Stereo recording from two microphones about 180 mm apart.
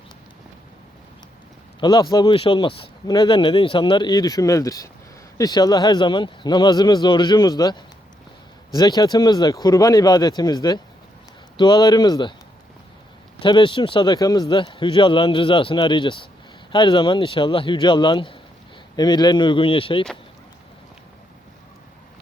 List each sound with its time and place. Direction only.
1.8 s speech: 20° left (ahead or behind)
13.4 s speech: 25° left (ahead or behind)